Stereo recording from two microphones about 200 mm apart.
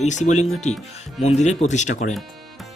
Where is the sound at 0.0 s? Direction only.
35° left (ahead or behind).